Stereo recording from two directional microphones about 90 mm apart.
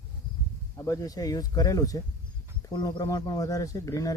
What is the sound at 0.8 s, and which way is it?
Speech, 40° left (ahead or behind).